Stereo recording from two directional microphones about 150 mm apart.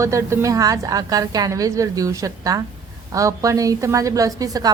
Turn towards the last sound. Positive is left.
turn(degrees=-25)  # may be behind; listen again after turning